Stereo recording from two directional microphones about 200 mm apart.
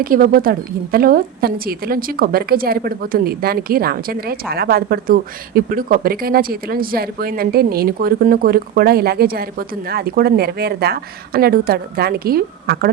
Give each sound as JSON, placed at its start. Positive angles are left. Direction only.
{"t": 0.0, "sound": "a woman's voice", "side_deg": -45}